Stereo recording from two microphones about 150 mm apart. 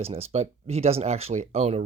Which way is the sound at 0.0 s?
45° right (ahead or behind).